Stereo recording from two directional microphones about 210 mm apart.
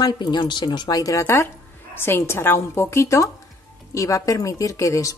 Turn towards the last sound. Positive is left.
turn(degrees=15)  # may be behind; listen again after turning